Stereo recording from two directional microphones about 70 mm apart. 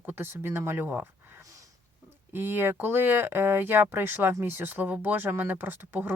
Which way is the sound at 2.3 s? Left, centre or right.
Right.